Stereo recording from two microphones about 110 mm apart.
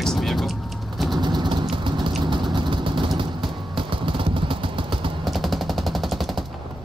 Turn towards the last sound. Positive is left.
turn(degrees=0)  # may be behind; listen again after turning